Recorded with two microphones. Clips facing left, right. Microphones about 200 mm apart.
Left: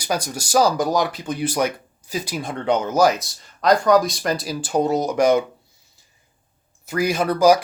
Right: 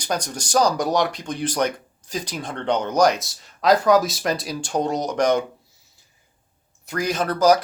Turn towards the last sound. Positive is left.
turn(degrees=10)  # may be behind; listen again after turning